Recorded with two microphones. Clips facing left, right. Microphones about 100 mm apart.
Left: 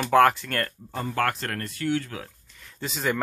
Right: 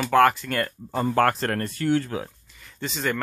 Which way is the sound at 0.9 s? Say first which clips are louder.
Right 7 dB; 35° right (ahead or behind).